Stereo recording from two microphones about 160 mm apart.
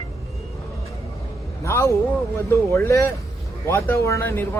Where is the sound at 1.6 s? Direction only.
20° left (ahead or behind).